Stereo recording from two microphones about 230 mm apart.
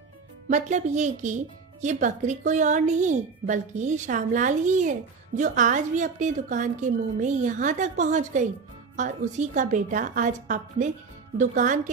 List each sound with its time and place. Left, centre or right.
0.5 s speech: right